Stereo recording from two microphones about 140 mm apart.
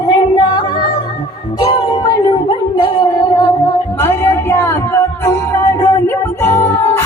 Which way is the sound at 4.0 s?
20° left (ahead or behind).